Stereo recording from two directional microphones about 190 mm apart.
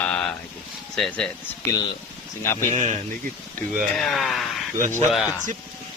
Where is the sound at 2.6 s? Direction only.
40° right (ahead or behind).